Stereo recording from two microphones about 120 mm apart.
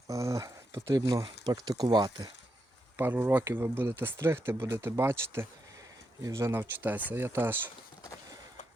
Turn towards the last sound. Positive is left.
turn(degrees=-15)  # may be behind; listen again after turning